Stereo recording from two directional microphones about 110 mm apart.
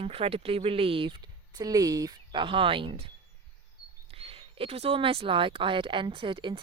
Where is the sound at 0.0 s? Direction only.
60° right (ahead or behind).